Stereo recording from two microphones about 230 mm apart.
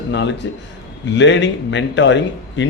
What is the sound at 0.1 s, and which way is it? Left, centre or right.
A man's voice, left.